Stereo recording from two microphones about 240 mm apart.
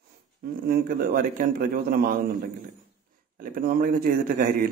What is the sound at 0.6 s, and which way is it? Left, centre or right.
A man's voice, right.